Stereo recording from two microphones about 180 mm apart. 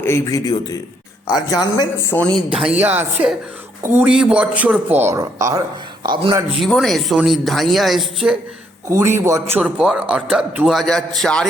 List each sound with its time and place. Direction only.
0.0 s speech: 15° left (ahead or behind)
2.5 s a man's voice: 5° right (ahead or behind); by 6.4 s 25° right (ahead or behind)
6.6 s a man's voice: centre (ahead or behind)
8.9 s a man's voice: 15° right (ahead or behind); by 11.4 s 5° left (ahead or behind)